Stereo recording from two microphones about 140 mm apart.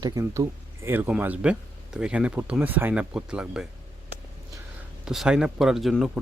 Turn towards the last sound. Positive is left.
turn(degrees=0)  # may be behind; listen again after turning